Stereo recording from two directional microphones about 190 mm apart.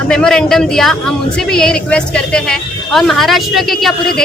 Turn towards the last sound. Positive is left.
turn(degrees=0)  # may be behind; listen again after turning